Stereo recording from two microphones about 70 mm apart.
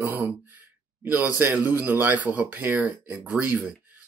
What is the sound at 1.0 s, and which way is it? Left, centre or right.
Speech, right.